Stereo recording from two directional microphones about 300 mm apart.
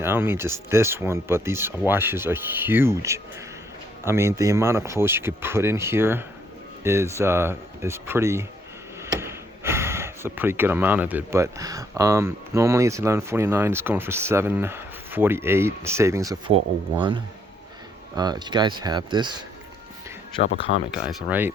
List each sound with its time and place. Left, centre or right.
0.0 s speech: centre
20.4 s speech: centre
20.9 s speech: centre